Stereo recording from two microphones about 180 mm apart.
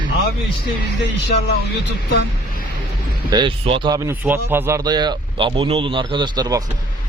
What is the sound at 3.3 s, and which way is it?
Speech, 25° right (ahead or behind).